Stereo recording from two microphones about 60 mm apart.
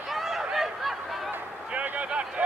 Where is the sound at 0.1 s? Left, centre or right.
Centre.